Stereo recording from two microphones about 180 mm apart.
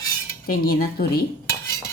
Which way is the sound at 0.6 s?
55° left (ahead or behind).